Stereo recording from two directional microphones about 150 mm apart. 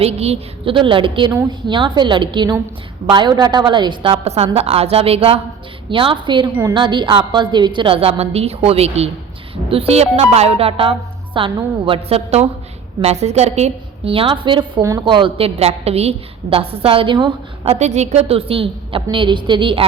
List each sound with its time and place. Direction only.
0.0 s a woman's voice: 45° right (ahead or behind)
14.8 s a woman's voice: 20° right (ahead or behind)
15.0 s a woman's voice: 35° right (ahead or behind)
17.7 s a woman's voice: 50° right (ahead or behind); by 19.8 s 35° right (ahead or behind)